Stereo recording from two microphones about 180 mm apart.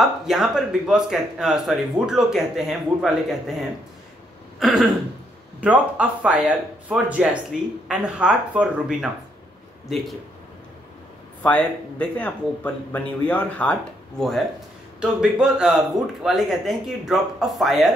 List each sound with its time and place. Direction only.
0.0 s speech: centre (ahead or behind)
4.6 s throat clearing: centre (ahead or behind)
5.6 s speech: 5° right (ahead or behind)
11.4 s a man's voice: 5° left (ahead or behind)
15.0 s speech: 5° right (ahead or behind)